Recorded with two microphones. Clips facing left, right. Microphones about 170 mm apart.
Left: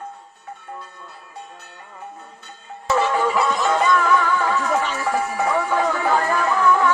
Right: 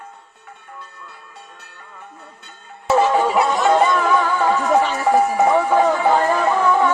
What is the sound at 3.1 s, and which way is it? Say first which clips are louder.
Music: right 3 dB; 25° right (ahead or behind).